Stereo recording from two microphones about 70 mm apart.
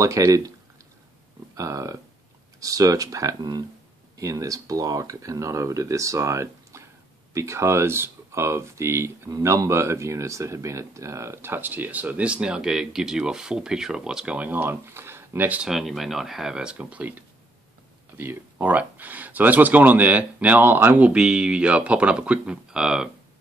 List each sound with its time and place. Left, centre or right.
0.0 s speech: right
1.5 s speech: right
15.4 s speech: right
15.7 s speech: centre
16.7 s speech: right
18.1 s speech: right
20.6 s speech: right
21.0 s speech: centre